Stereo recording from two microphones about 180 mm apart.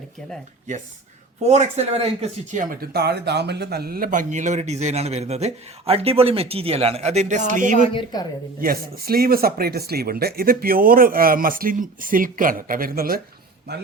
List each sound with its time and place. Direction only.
1.4 s speech: 35° right (ahead or behind)
2.5 s speech: 50° right (ahead or behind)
7.9 s a woman's voice: 20° left (ahead or behind)
8.6 s speech: 55° right (ahead or behind)